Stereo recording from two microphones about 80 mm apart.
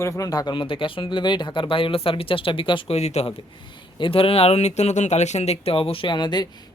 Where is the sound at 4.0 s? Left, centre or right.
Left.